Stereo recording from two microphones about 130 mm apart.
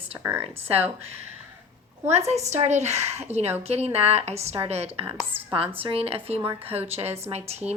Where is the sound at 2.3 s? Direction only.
60° right (ahead or behind).